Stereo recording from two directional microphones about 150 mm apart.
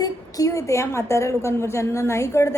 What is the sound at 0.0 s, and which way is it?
A woman's voice, 25° left (ahead or behind).